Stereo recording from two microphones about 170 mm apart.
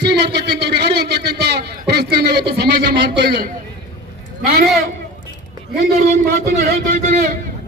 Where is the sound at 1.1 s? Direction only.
75° right (ahead or behind).